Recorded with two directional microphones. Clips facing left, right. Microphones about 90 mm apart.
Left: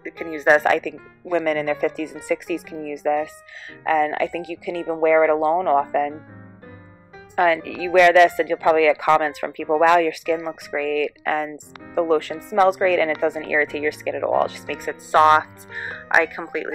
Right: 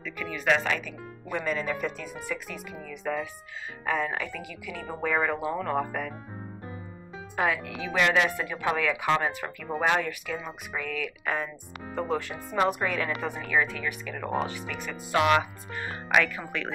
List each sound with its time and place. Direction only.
0.0 s speech: 25° left (ahead or behind)
0.5 s speech: 45° left (ahead or behind)
1.3 s speech: 65° left (ahead or behind)
2.9 s speech: 90° left
3.8 s speech: 80° left
7.3 s speech: 80° left
14.8 s speech: 40° left (ahead or behind)
15.7 s speech: 20° left (ahead or behind)